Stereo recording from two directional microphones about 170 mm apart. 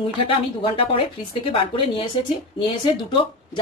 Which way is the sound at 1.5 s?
30° left (ahead or behind).